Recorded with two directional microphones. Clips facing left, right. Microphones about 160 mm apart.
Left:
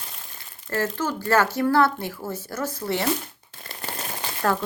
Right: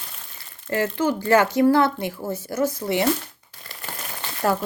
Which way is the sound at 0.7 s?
15° right (ahead or behind).